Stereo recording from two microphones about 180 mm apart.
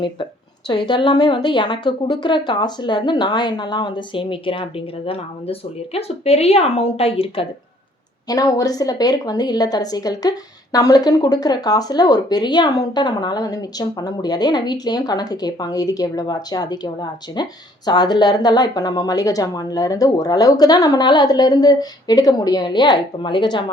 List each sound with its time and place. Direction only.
0.7 s speech: 25° left (ahead or behind)
8.3 s speech: 20° left (ahead or behind)